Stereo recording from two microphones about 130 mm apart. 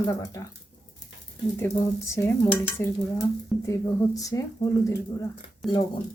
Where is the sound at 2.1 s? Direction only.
15° left (ahead or behind).